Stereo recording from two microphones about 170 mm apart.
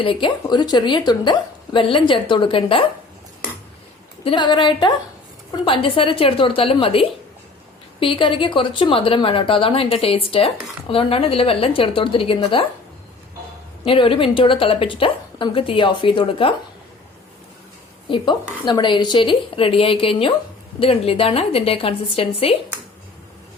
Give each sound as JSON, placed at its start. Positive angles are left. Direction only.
{"t": 0.0, "sound": "a woman's voice", "side_deg": 30}
{"t": 4.2, "sound": "a woman's voice", "side_deg": 30}
{"t": 13.8, "sound": "speech", "side_deg": 30}
{"t": 18.6, "sound": "speech", "side_deg": 25}